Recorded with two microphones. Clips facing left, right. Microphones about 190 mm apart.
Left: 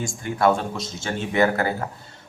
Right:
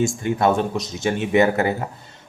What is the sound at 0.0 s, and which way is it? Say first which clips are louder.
Speech: right 2 dB; 20° right (ahead or behind).